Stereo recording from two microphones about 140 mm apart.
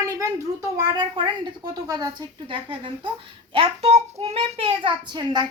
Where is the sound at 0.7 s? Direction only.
30° right (ahead or behind).